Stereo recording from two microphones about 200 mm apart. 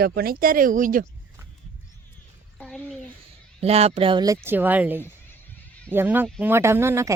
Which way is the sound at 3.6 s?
30° right (ahead or behind).